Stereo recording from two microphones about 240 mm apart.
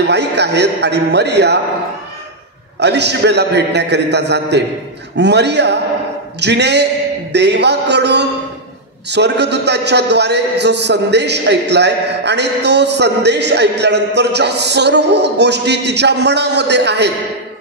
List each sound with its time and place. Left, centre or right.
0.0 s a man's voice: right
2.8 s a man's voice: right